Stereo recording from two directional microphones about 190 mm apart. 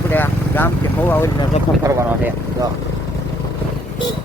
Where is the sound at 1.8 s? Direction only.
15° right (ahead or behind).